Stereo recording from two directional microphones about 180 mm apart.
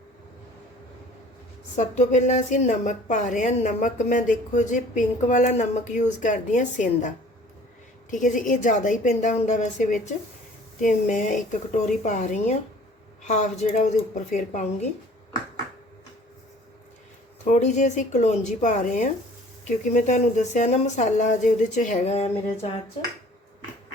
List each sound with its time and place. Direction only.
1.7 s a woman's voice: 45° left (ahead or behind)
8.1 s a woman's voice: 45° left (ahead or behind)
17.4 s speech: 40° left (ahead or behind)